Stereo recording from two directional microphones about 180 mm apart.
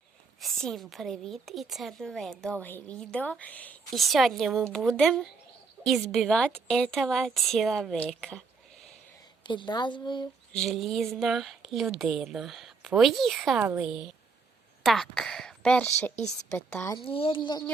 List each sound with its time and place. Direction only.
0.3 s a woman's voice: centre (ahead or behind)
9.4 s speech: 25° left (ahead or behind)
10.5 s a woman's voice: centre (ahead or behind)
17.0 s speech: 30° left (ahead or behind)